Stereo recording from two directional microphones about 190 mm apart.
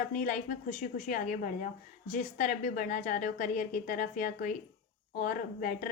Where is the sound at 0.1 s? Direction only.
45° left (ahead or behind).